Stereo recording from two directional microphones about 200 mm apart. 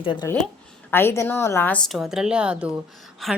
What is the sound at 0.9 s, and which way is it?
A woman's voice, 10° left (ahead or behind).